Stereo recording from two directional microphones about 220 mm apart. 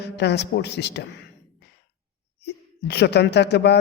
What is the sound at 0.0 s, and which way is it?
A woman's voice, 50° left (ahead or behind).